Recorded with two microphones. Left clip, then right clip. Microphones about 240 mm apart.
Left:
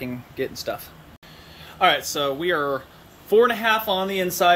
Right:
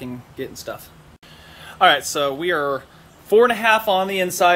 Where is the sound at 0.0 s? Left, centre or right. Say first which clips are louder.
Left 2 dB; centre.